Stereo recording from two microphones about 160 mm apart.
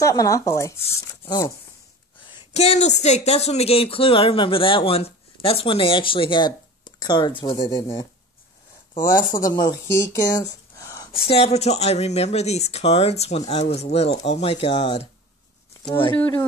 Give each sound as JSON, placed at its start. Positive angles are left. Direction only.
{"t": 0.0, "sound": "speech", "side_deg": 20}
{"t": 2.2, "sound": "speech", "side_deg": 35}
{"t": 9.4, "sound": "speech", "side_deg": 25}
{"t": 11.1, "sound": "speech", "side_deg": 40}